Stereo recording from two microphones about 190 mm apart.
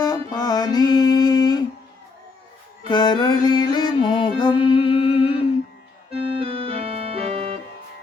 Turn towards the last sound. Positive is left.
turn(degrees=-35)  # may be behind; listen again after turning